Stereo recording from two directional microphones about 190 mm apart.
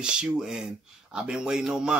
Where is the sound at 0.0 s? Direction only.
5° right (ahead or behind).